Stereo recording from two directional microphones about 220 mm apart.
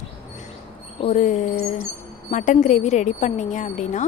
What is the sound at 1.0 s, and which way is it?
A woman's voice, 35° left (ahead or behind).